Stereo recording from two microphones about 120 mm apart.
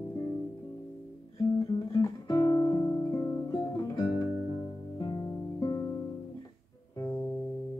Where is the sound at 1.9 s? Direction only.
30° left (ahead or behind).